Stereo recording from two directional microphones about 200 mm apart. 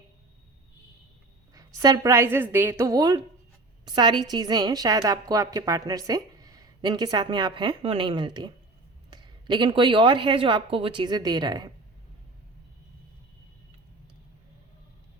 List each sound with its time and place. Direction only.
1.5 s a woman's voice: 15° right (ahead or behind)